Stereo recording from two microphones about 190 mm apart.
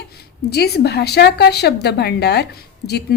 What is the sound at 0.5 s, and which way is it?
Speech, 55° left (ahead or behind).